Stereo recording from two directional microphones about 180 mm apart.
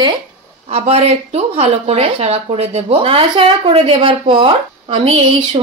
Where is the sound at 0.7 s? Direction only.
35° right (ahead or behind).